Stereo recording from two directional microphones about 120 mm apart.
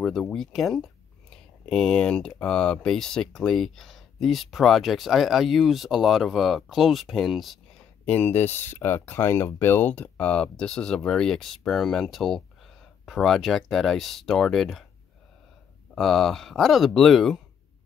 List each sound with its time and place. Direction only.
0.0 s speech: 5° left (ahead or behind)
8.0 s speech: 15° left (ahead or behind)
15.9 s speech: centre (ahead or behind)